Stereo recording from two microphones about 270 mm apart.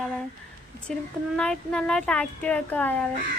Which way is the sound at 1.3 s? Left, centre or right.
Centre.